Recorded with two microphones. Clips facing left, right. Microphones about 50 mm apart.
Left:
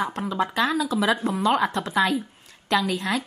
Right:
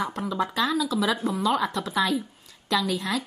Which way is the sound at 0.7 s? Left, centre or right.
Left.